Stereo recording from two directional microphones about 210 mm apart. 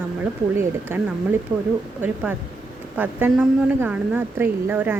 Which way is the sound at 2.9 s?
10° right (ahead or behind).